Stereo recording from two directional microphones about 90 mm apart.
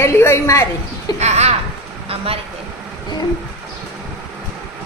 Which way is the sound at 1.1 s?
50° left (ahead or behind).